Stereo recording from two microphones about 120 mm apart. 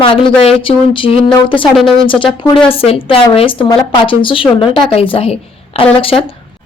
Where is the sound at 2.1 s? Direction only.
45° left (ahead or behind).